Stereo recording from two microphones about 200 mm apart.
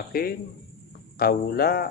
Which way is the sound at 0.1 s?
50° left (ahead or behind).